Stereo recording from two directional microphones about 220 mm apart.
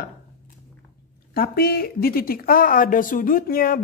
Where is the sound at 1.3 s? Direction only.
45° left (ahead or behind).